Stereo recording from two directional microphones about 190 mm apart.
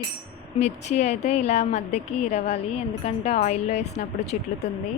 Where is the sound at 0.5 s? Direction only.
35° left (ahead or behind).